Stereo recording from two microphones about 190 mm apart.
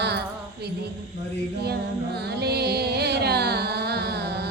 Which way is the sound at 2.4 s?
60° right (ahead or behind).